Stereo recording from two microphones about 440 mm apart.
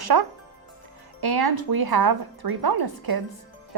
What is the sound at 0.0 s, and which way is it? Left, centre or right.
Speech, right.